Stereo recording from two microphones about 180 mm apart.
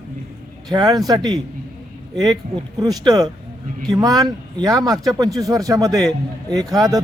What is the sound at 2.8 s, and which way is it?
Speech, 20° right (ahead or behind).